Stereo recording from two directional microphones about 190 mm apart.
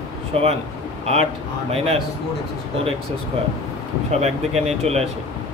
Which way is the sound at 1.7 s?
30° right (ahead or behind).